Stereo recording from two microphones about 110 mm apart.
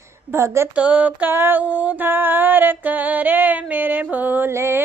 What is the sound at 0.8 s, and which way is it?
Music, 15° right (ahead or behind).